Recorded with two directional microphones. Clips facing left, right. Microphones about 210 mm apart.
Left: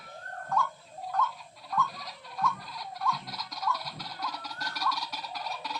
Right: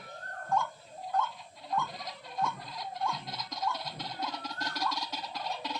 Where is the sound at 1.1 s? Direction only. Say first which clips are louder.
Even; 30° right (ahead or behind).